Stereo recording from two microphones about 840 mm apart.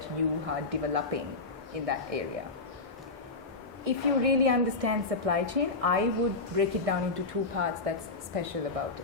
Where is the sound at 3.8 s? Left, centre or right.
Right.